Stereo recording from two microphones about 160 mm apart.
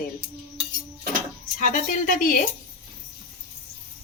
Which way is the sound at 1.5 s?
55° left (ahead or behind).